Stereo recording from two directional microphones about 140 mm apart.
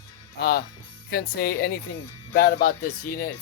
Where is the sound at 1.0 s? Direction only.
90° left.